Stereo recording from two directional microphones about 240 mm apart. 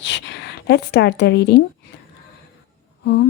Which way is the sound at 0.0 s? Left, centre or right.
Left.